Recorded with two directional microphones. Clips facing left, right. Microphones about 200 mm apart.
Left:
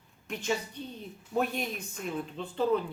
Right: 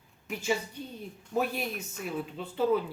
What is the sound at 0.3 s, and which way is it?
A woman's voice, 5° right (ahead or behind).